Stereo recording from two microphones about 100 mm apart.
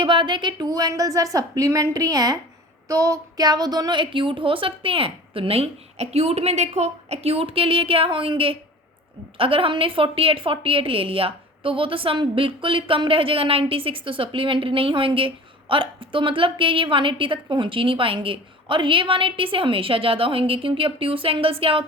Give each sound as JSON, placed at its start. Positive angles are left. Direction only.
{"t": 0.0, "sound": "a woman's voice", "side_deg": -55}